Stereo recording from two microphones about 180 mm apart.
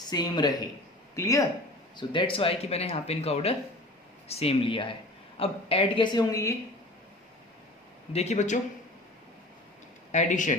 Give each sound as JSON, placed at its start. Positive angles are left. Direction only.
{"t": 0.1, "sound": "speech", "side_deg": 25}
{"t": 2.0, "sound": "speech", "side_deg": 30}
{"t": 8.1, "sound": "speech", "side_deg": 35}
{"t": 10.1, "sound": "speech", "side_deg": 40}